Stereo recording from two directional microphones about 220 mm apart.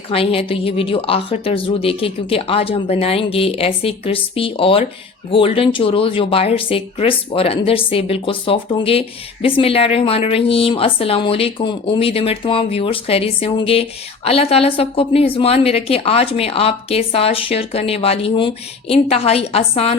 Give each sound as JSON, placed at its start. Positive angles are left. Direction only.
{"t": 0.1, "sound": "speech", "side_deg": 25}